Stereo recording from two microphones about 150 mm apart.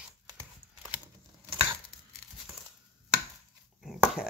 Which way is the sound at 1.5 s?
35° right (ahead or behind).